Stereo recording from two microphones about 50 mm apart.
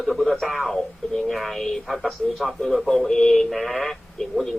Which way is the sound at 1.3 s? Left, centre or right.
Centre.